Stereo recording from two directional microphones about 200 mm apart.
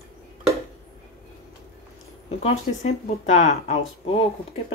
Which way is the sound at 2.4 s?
35° left (ahead or behind).